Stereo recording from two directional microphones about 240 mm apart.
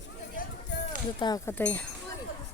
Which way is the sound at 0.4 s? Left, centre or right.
Left.